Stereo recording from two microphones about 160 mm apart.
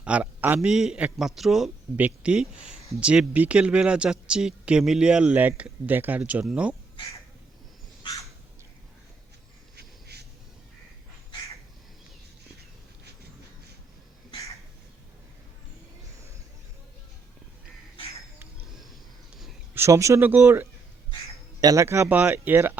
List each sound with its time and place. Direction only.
0.0 s a man's voice: 10° right (ahead or behind)
9.7 s a sound: 90° right
19.7 s a man's voice: 15° right (ahead or behind)